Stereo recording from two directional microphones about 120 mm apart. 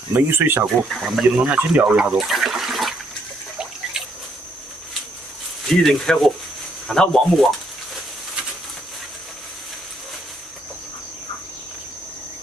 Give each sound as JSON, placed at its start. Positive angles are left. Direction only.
{"t": 0.1, "sound": "speech", "side_deg": -20}
{"t": 0.8, "sound": "speech", "side_deg": 0}
{"t": 1.2, "sound": "speech", "side_deg": -10}
{"t": 5.7, "sound": "speech", "side_deg": 5}